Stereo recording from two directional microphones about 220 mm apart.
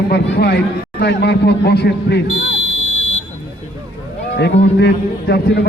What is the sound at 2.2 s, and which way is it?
Buzzer, 25° left (ahead or behind).